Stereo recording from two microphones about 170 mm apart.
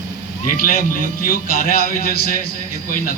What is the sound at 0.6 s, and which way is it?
A man's voice, 55° left (ahead or behind).